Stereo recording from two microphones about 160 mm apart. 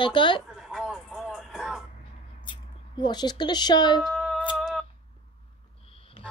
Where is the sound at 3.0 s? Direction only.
25° left (ahead or behind).